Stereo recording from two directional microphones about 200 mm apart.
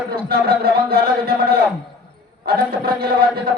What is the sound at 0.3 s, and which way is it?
A man's voice, 50° right (ahead or behind).